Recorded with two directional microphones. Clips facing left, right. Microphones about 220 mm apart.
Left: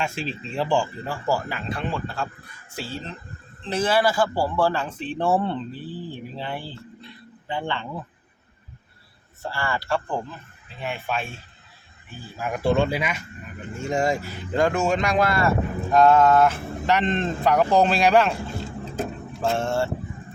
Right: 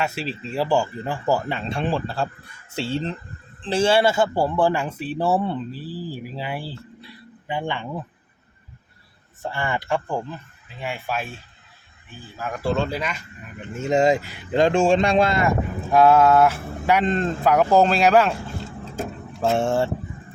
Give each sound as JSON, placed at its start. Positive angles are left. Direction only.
{"t": 0.0, "sound": "speech", "side_deg": -5}
{"t": 9.4, "sound": "speech", "side_deg": -20}
{"t": 10.8, "sound": "speech", "side_deg": -5}
{"t": 12.4, "sound": "speech", "side_deg": 15}
{"t": 13.8, "sound": "speech", "side_deg": -20}
{"t": 19.5, "sound": "speech", "side_deg": -15}